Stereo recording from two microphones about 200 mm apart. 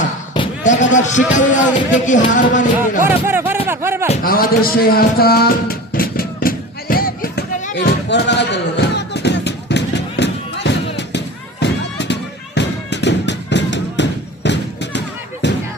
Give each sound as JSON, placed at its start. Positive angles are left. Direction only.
{"t": 0.6, "sound": "a sound", "side_deg": 40}
{"t": 2.0, "sound": "music", "side_deg": 40}
{"t": 3.0, "sound": "speech", "side_deg": -10}
{"t": 4.2, "sound": "music", "side_deg": 45}
{"t": 7.8, "sound": "music", "side_deg": 60}
{"t": 12.5, "sound": "a sound", "side_deg": 60}